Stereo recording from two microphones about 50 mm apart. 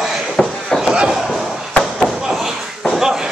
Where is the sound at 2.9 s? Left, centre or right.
Centre.